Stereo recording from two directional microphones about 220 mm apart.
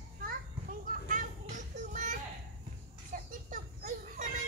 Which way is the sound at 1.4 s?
35° right (ahead or behind).